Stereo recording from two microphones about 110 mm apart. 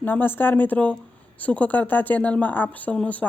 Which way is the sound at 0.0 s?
15° left (ahead or behind).